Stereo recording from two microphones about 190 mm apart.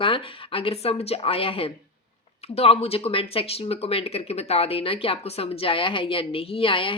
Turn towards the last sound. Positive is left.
turn(degrees=25)  # may be behind; listen again after turning